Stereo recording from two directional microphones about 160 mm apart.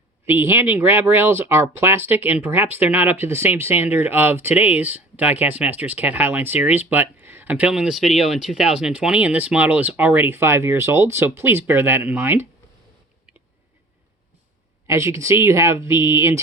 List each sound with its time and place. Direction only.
0.3 s speech: 15° right (ahead or behind)
14.8 s speech: 20° right (ahead or behind)